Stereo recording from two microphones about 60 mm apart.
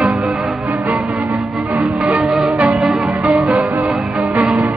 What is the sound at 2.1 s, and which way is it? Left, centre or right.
Music, centre.